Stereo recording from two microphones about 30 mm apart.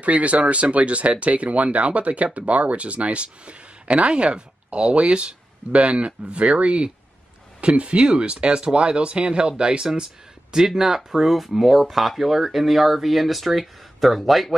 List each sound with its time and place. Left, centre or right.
0.0 s speech: right
10.6 s speech: centre